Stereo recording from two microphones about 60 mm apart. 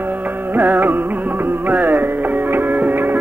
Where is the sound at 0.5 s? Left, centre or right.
Right.